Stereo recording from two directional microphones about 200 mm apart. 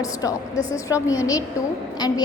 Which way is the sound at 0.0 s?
15° left (ahead or behind).